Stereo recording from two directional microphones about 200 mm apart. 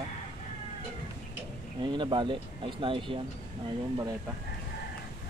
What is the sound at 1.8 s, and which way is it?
Speech, 25° right (ahead or behind).